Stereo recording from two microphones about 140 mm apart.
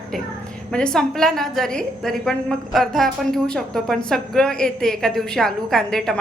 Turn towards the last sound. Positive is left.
turn(degrees=5)  # may be behind; listen again after turning